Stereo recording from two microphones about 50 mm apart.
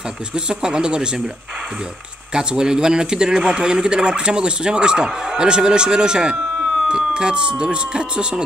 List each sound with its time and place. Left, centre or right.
0.3 s a man's voice: centre
2.3 s a man's voice: centre